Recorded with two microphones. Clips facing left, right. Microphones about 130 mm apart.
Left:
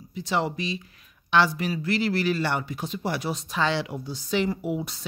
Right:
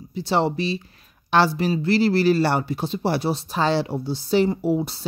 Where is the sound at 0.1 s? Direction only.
30° right (ahead or behind).